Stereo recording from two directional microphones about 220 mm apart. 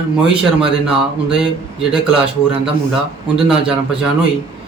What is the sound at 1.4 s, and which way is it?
Speech, centre (ahead or behind).